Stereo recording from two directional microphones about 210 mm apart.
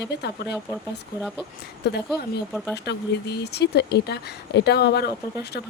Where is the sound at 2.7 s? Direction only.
50° left (ahead or behind).